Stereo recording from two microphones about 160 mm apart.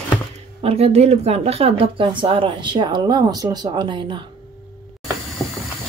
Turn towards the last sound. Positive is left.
turn(degrees=0)  # may be behind; listen again after turning